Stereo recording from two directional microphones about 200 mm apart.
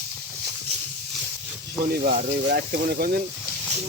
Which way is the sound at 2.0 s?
50° right (ahead or behind).